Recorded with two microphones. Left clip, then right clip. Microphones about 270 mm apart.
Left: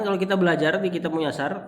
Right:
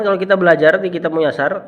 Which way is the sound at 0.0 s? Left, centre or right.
Centre.